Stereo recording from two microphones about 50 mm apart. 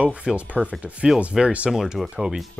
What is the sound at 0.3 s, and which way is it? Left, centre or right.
Speech, centre.